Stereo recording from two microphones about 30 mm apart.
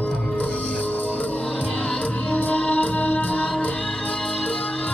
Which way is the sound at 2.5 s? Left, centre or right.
Left.